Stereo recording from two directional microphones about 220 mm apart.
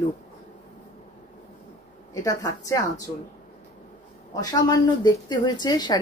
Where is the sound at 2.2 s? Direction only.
15° left (ahead or behind).